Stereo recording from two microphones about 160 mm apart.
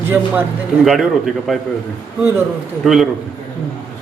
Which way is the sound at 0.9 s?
Centre (ahead or behind).